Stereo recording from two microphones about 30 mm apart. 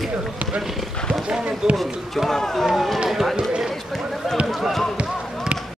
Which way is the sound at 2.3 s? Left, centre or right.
Centre.